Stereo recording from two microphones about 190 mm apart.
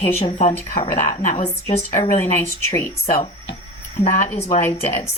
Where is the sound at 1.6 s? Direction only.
25° left (ahead or behind).